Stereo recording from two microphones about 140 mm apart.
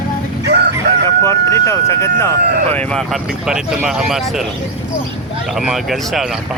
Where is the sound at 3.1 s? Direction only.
5° right (ahead or behind).